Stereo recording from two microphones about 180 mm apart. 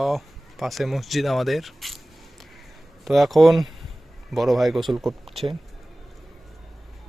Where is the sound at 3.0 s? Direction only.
Centre (ahead or behind).